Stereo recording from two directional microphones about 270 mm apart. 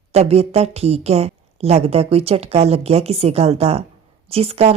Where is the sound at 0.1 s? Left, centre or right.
Right.